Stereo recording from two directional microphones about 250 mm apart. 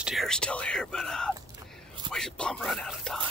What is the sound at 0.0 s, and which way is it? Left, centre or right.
Speech, centre.